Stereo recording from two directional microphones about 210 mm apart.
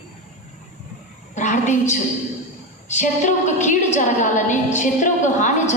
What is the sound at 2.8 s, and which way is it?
A woman's voice, 35° left (ahead or behind).